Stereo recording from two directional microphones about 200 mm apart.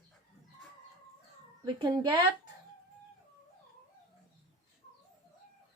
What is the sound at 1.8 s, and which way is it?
Speech, 20° right (ahead or behind).